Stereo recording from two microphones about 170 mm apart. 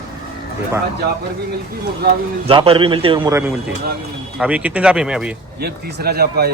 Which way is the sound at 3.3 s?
15° right (ahead or behind).